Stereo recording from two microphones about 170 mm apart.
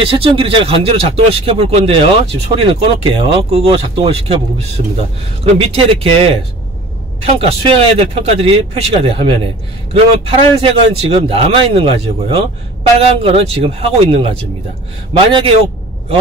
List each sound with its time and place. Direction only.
0.0 s speech: 30° right (ahead or behind)